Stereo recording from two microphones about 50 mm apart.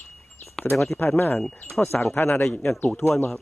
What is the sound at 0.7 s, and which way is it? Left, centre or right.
Speech, centre.